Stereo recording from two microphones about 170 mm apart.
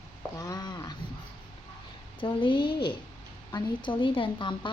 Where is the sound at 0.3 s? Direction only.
20° left (ahead or behind).